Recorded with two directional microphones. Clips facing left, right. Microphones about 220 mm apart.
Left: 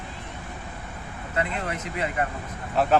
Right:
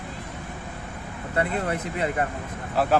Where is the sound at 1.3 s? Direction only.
35° right (ahead or behind).